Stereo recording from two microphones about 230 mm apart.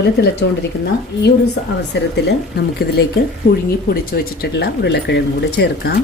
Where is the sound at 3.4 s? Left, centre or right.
Left.